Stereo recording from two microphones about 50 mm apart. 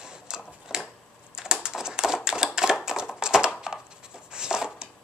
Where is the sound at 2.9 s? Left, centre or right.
Centre.